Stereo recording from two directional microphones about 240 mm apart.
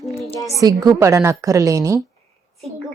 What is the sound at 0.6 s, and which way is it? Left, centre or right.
A woman's voice, centre.